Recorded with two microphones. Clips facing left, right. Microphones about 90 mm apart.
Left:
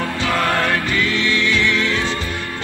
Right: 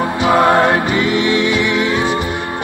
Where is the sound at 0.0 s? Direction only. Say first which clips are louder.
Right 7 dB; 25° right (ahead or behind).